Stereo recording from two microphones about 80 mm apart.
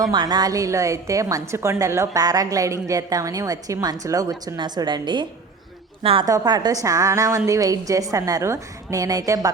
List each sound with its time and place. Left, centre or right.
0.0 s a woman's voice: right
4.5 s a woman's voice: right
6.2 s a woman's voice: right
6.8 s a woman's voice: right